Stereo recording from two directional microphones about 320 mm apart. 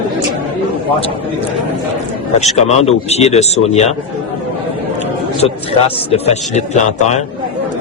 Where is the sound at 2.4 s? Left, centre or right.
Centre.